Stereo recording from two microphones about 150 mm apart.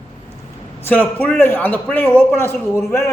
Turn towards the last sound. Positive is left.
turn(degrees=15)  # may be behind; listen again after turning